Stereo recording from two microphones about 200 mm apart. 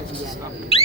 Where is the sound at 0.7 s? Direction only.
30° left (ahead or behind).